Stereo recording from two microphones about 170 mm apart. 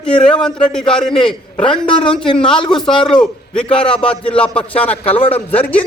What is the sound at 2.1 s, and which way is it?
Speech, 30° left (ahead or behind).